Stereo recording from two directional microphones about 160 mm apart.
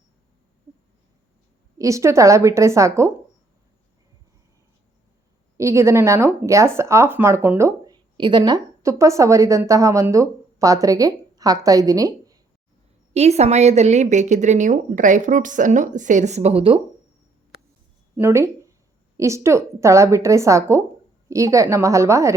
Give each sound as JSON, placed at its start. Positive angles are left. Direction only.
{"t": 1.8, "sound": "speech", "side_deg": -20}
{"t": 5.5, "sound": "speech", "side_deg": -20}
{"t": 13.1, "sound": "a woman's voice", "side_deg": -40}
{"t": 18.2, "sound": "speech", "side_deg": -15}